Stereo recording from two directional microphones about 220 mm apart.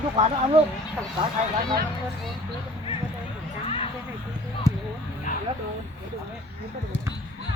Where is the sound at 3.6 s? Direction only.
25° left (ahead or behind).